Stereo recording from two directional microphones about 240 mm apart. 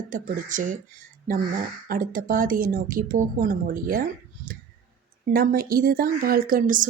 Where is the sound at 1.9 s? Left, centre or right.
Right.